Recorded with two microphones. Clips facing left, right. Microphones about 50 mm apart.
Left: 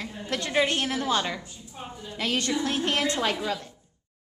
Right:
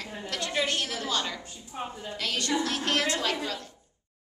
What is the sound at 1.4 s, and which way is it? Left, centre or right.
Speech, right.